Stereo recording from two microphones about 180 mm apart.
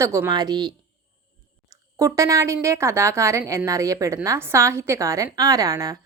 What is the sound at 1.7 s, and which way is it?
A woman's voice, 15° right (ahead or behind).